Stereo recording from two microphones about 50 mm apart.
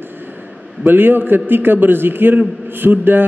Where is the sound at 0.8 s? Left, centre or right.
Right.